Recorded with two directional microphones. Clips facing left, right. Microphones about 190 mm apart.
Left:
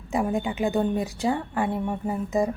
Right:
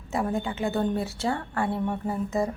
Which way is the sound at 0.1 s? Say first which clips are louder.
Left 2 dB; 15° left (ahead or behind).